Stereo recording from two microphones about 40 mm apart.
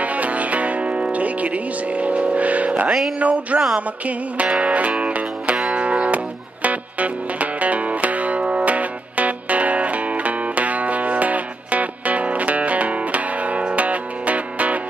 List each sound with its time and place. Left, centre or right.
0.0 s music: right
3.2 s speech: right
4.4 s music: right